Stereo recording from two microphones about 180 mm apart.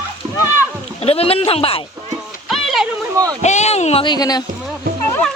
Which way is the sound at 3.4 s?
40° left (ahead or behind).